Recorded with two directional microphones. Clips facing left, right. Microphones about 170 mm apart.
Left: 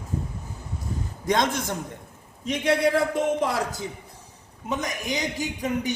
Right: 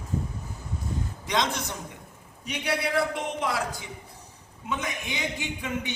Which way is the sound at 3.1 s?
40° left (ahead or behind).